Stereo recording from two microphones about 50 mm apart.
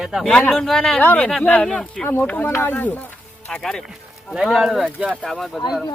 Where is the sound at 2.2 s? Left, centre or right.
Left.